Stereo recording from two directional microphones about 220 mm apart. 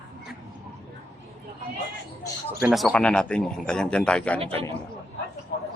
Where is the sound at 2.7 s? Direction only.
Centre (ahead or behind).